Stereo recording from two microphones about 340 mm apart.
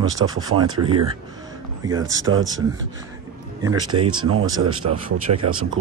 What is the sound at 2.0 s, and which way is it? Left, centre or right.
Speech, right.